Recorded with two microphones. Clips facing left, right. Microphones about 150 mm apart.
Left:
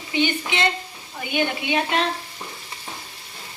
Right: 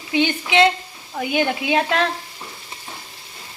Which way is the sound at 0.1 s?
90° right.